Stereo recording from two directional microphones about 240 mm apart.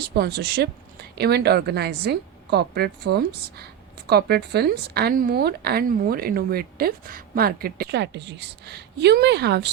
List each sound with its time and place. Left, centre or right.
0.0 s a woman's voice: right